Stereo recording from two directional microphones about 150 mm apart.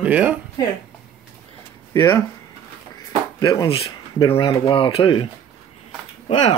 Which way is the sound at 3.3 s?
30° left (ahead or behind).